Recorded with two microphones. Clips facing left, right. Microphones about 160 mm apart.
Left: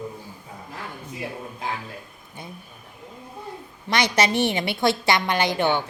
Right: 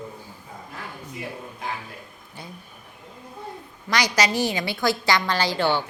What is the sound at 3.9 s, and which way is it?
A woman's voice, 25° left (ahead or behind).